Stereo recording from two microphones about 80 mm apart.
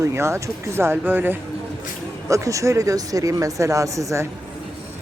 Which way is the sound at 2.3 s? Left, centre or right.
Right.